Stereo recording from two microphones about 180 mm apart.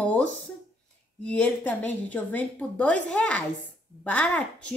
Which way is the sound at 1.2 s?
5° left (ahead or behind).